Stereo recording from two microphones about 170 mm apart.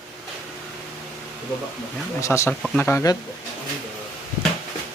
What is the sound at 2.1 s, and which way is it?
Speech, 15° left (ahead or behind).